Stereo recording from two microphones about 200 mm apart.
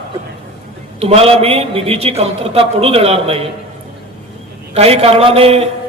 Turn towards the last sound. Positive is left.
turn(degrees=-30)  # may be behind; listen again after turning